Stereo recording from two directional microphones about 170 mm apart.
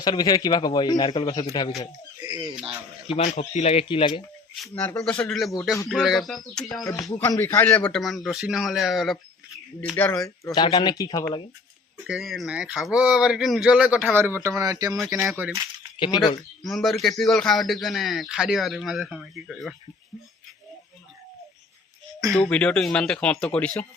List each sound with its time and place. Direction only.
0.0 s a man's voice: 25° left (ahead or behind)
2.2 s speech: 25° right (ahead or behind)
3.1 s speech: 40° left (ahead or behind)
4.5 s a man's voice: centre (ahead or behind)
4.8 s a man's voice: 10° left (ahead or behind)
7.1 s a man's voice: 20° left (ahead or behind)
7.9 s a man's voice: centre (ahead or behind)
9.9 s a man's voice: 15° left (ahead or behind)
12.0 s a man's voice: centre (ahead or behind); by 14.9 s 20° right (ahead or behind)
14.9 s a man's voice: centre (ahead or behind)
16.0 s a man's voice: 25° left (ahead or behind)
16.6 s a man's voice: centre (ahead or behind)
22.4 s a man's voice: 5° left (ahead or behind)